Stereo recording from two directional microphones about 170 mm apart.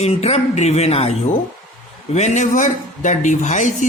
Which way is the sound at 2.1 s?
45° left (ahead or behind).